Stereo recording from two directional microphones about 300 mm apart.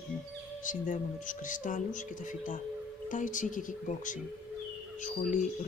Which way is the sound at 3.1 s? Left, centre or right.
Left.